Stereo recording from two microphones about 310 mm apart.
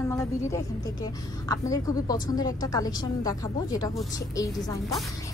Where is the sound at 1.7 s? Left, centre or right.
Centre.